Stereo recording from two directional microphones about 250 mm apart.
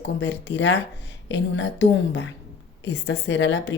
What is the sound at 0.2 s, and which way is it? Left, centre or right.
Speech, left.